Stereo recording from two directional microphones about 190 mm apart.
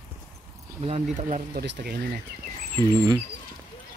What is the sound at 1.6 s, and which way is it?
Speech, 55° right (ahead or behind).